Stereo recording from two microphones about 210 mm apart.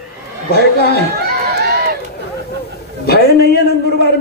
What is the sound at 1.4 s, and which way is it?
Run, 50° right (ahead or behind).